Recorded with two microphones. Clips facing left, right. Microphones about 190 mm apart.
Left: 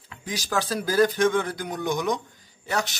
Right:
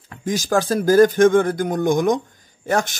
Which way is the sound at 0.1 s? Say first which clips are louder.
Right 8 dB; 45° right (ahead or behind).